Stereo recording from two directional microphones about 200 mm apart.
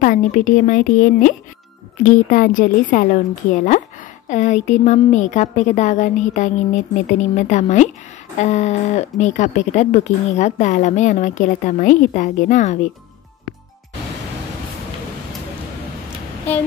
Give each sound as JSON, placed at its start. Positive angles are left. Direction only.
{"t": 0.0, "sound": "speech", "side_deg": 40}